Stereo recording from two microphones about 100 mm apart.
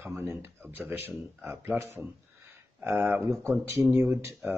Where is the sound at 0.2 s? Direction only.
25° right (ahead or behind).